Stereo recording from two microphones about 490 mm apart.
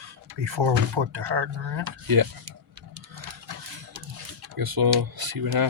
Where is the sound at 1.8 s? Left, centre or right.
Right.